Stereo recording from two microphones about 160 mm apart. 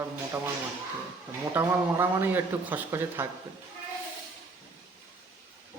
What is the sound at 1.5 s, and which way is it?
Speech, 15° right (ahead or behind).